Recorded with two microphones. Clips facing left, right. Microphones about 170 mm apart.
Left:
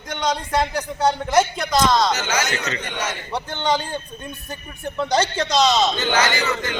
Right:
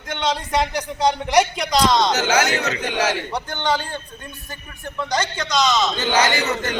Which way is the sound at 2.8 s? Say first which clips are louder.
Right 6 dB; 80° right.